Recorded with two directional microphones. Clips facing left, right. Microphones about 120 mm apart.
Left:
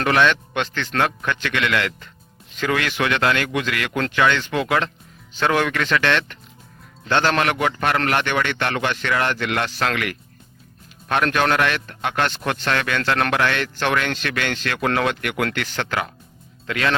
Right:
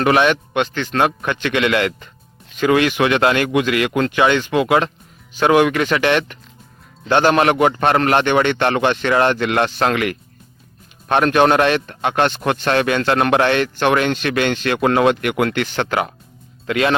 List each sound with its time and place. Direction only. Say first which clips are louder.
0.0 s a man's voice: right 3 dB; 15° right (ahead or behind)